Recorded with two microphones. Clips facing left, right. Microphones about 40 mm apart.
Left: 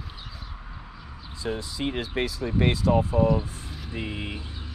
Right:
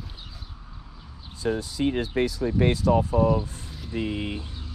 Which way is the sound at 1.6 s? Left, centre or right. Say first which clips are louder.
Right 4 dB; left.